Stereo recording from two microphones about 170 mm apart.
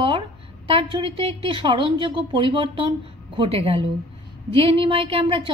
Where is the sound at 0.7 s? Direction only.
30° right (ahead or behind).